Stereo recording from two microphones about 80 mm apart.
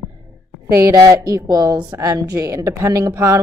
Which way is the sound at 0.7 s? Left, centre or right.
Right.